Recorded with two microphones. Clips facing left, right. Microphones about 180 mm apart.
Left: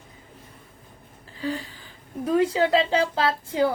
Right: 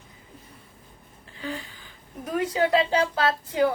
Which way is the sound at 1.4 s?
35° left (ahead or behind).